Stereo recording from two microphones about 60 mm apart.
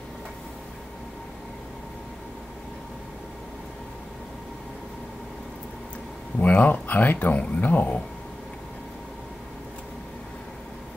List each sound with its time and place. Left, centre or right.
6.4 s speech: left